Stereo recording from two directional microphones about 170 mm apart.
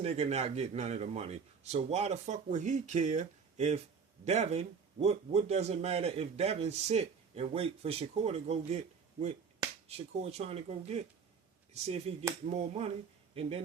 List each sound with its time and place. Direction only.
0.0 s speech: 40° right (ahead or behind)